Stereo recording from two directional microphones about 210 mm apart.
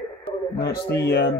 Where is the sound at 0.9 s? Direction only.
50° left (ahead or behind).